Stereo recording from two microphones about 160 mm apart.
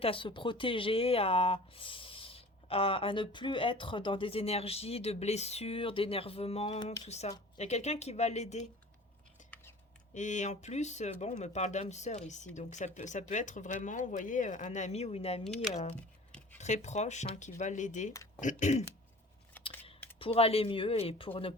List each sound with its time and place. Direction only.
0.0 s speech: 35° left (ahead or behind)
10.2 s speech: 50° left (ahead or behind)
20.1 s speech: 35° left (ahead or behind)